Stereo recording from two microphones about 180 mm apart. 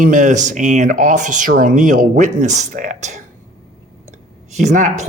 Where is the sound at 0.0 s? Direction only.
45° right (ahead or behind).